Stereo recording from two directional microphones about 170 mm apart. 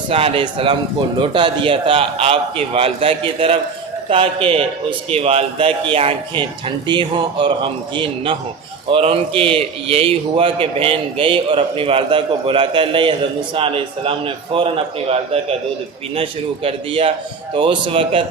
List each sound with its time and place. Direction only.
0.1 s a man's voice: 35° right (ahead or behind)